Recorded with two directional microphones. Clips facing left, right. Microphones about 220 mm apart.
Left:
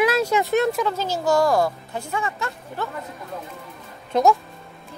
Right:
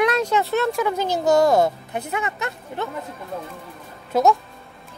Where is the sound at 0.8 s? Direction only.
15° right (ahead or behind).